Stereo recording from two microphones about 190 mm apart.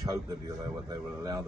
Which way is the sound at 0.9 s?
20° right (ahead or behind).